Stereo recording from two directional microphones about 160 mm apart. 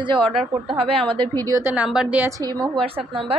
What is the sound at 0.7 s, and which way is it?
Speech, 35° right (ahead or behind).